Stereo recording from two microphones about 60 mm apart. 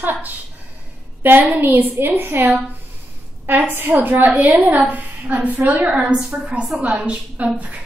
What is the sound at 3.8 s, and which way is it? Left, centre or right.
A woman's voice, right.